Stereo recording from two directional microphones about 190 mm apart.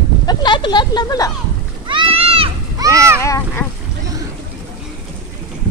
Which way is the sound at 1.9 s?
25° right (ahead or behind).